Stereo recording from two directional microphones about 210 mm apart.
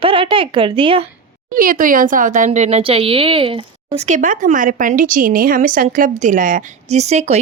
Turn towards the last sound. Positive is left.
turn(degrees=-30)  # may be behind; listen again after turning